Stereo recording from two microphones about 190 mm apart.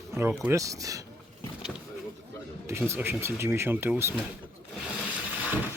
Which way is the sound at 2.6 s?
15° right (ahead or behind).